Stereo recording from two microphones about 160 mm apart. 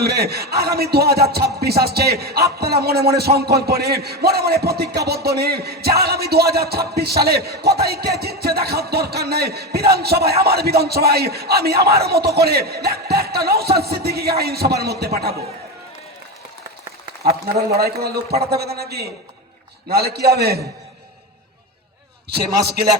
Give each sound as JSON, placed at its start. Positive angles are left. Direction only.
{"t": 0.0, "sound": "a man's voice", "side_deg": -80}
{"t": 17.2, "sound": "a man's voice", "side_deg": -75}